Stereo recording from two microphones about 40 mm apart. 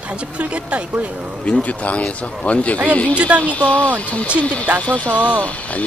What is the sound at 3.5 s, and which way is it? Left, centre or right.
Speech, left.